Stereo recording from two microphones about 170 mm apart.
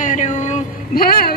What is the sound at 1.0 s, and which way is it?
Speech, 65° left (ahead or behind).